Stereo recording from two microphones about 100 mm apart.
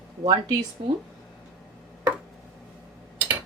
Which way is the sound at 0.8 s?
65° right (ahead or behind).